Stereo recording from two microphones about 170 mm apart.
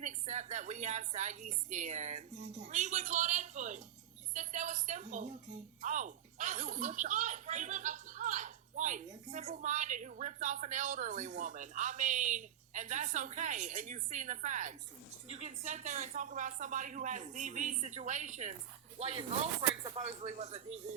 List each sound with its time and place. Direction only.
0.0 s a woman's voice: 45° right (ahead or behind)